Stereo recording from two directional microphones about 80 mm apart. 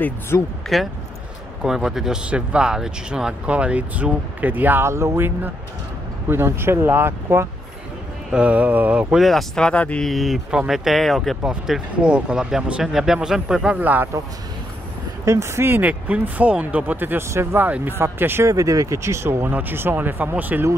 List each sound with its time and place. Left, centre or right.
0.3 s speech: left
1.6 s speech: centre; by 4.8 s right
4.8 s speech: right
8.3 s speech: centre
9.2 s speech: centre
10.0 s speech: centre
13.7 s speech: right
15.2 s speech: right
17.6 s speech: right
18.5 s speech: right